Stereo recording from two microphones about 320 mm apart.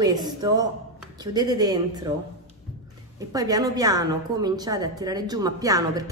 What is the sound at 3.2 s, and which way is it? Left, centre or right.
A woman's voice, centre.